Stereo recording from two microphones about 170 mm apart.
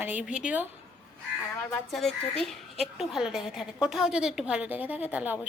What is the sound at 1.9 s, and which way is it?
A woman's voice, centre (ahead or behind).